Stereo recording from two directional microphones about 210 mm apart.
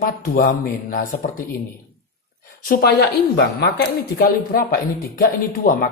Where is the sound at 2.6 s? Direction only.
45° left (ahead or behind).